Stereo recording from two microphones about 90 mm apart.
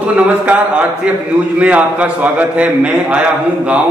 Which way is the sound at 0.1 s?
15° right (ahead or behind).